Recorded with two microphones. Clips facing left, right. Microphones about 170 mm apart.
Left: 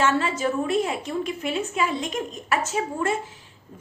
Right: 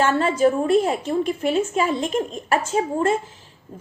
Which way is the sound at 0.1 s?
55° right (ahead or behind).